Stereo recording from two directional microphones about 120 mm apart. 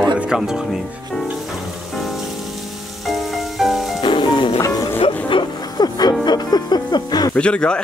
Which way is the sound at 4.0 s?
40° left (ahead or behind).